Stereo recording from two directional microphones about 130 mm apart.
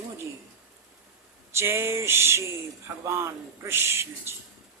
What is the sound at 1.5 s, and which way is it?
Speech, 20° right (ahead or behind).